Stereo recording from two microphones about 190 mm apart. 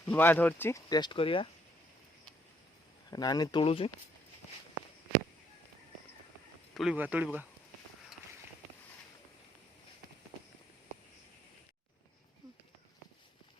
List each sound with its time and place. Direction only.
0.0 s speech: 10° left (ahead or behind); by 1.5 s 30° left (ahead or behind)
3.1 s speech: 20° left (ahead or behind)
6.7 s speech: 5° right (ahead or behind)